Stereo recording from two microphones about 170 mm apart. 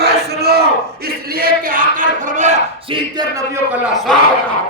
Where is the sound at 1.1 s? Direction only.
60° right (ahead or behind); by 2.6 s 45° right (ahead or behind).